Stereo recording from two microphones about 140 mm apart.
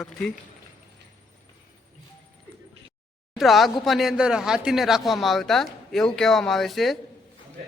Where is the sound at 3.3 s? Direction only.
Centre (ahead or behind).